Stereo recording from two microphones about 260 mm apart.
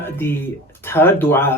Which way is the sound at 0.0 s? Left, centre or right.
Centre.